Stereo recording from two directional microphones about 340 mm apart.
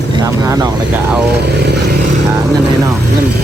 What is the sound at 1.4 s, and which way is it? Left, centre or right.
Speech, right.